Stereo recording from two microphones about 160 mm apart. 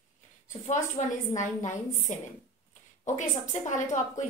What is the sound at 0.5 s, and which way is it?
A woman's voice, 50° left (ahead or behind).